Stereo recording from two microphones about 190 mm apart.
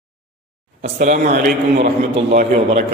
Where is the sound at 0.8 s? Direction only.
40° right (ahead or behind).